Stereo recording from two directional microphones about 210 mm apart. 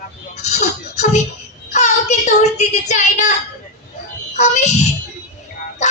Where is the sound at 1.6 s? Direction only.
35° left (ahead or behind).